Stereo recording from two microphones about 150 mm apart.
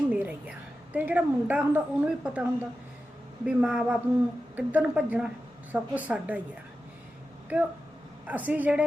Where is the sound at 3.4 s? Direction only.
5° right (ahead or behind).